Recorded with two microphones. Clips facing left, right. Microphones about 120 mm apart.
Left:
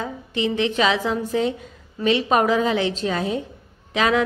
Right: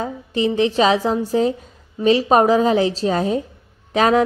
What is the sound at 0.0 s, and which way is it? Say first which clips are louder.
A woman's voice: right 4 dB; 35° right (ahead or behind).